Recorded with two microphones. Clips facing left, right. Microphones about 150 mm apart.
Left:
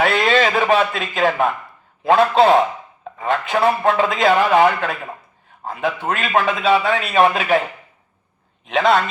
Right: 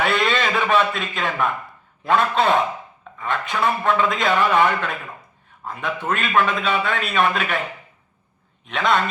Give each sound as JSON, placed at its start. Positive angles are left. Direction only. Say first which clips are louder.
{"t": 0.0, "sound": "a man's voice", "louder": "left 4 dB", "side_deg": 40}
{"t": 8.7, "sound": "a man's voice", "louder": "left 5 dB", "side_deg": 35}